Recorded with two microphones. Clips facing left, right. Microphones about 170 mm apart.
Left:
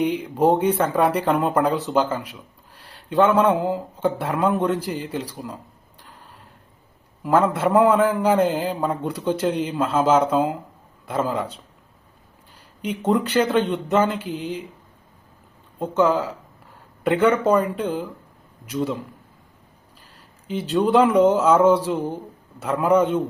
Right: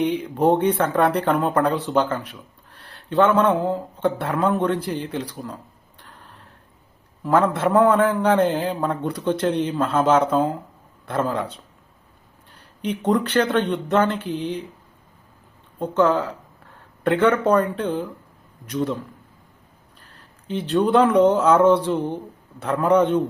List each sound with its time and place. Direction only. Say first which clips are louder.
0.0 s speech: even; 10° left (ahead or behind)
7.2 s a man's voice: even; 5° left (ahead or behind)
12.5 s speech: right 2 dB; 10° left (ahead or behind)
15.8 s speech: even; 10° left (ahead or behind)
20.0 s speech: right 1 dB; 10° left (ahead or behind)